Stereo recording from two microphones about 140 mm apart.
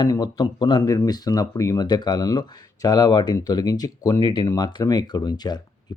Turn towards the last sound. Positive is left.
turn(degrees=30)  # may be behind; listen again after turning